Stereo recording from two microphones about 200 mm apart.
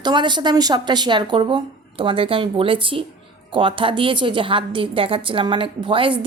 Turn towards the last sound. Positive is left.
turn(degrees=-25)  # may be behind; listen again after turning